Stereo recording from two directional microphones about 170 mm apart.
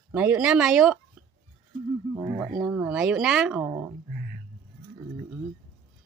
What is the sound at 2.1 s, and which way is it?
Speech, 20° right (ahead or behind).